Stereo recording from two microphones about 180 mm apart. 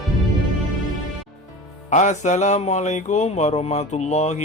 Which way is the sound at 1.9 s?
40° left (ahead or behind).